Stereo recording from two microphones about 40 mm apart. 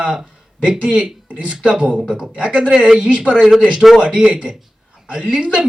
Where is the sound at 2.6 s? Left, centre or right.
Centre.